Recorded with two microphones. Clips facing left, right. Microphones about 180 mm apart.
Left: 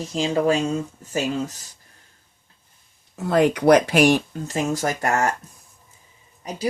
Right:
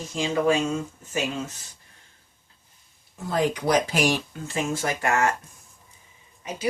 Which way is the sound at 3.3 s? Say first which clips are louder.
Left 7 dB; 65° left (ahead or behind).